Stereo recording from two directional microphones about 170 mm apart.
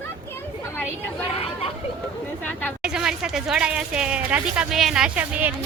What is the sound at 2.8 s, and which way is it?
Speech, 5° right (ahead or behind).